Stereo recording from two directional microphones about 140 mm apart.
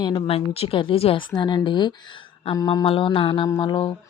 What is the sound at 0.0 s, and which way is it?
Speech, 35° left (ahead or behind).